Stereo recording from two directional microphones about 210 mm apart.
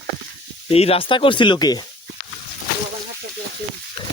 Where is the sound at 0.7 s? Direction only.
30° left (ahead or behind).